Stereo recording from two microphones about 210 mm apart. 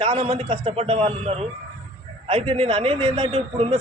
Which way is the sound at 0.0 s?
30° right (ahead or behind).